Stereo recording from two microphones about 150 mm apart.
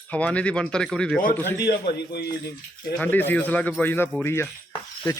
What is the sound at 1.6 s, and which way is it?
Speech, 90° left.